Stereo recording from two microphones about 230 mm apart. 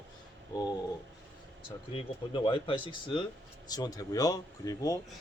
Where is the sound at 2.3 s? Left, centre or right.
Left.